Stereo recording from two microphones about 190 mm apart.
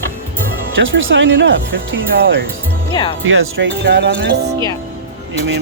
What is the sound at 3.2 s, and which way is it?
Speech, 85° right.